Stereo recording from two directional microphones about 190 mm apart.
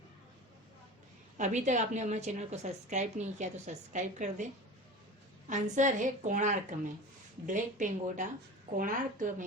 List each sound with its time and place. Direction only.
1.4 s a woman's voice: 40° right (ahead or behind)
5.5 s a woman's voice: 40° right (ahead or behind)